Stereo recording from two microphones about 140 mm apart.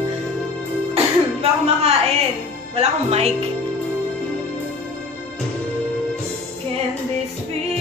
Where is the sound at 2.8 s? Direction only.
50° right (ahead or behind).